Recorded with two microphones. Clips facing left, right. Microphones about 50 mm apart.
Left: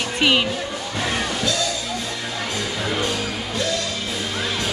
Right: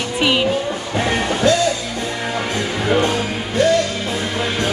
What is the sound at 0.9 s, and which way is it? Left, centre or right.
Music, right.